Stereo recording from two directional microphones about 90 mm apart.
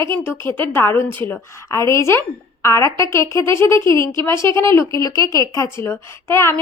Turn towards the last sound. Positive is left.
turn(degrees=25)  # may be behind; listen again after turning